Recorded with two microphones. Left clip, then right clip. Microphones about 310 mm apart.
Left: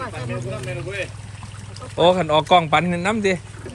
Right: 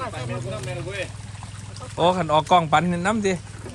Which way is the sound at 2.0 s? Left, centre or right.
Centre.